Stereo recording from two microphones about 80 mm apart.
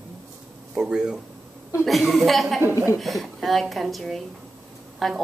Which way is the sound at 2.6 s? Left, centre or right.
Right.